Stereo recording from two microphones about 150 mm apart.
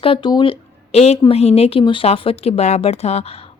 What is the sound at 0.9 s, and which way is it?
A woman's voice, 45° left (ahead or behind).